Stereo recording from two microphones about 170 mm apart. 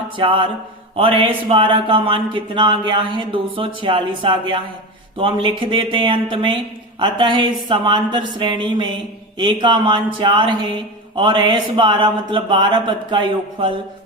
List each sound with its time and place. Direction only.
0.2 s speech: 30° right (ahead or behind)